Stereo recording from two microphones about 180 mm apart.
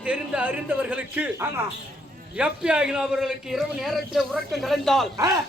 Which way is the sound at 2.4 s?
5° right (ahead or behind).